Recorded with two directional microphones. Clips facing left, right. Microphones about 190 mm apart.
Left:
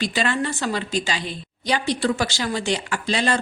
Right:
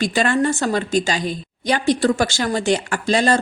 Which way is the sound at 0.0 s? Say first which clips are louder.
Right 5 dB; 50° right (ahead or behind).